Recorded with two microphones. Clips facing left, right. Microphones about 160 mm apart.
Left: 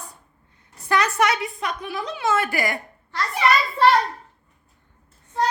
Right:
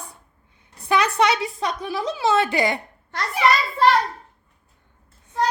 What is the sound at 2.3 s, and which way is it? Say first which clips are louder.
Speech: right 3 dB; 25° right (ahead or behind).